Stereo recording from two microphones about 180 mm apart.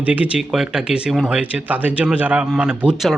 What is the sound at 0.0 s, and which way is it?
Speech, 10° right (ahead or behind).